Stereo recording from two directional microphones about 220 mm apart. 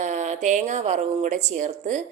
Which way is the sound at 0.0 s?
30° right (ahead or behind).